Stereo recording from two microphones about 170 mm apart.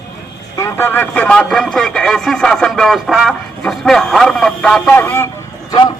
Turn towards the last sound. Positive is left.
turn(degrees=25)  # may be behind; listen again after turning